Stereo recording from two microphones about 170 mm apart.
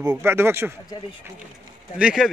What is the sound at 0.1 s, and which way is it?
Speech, 15° right (ahead or behind).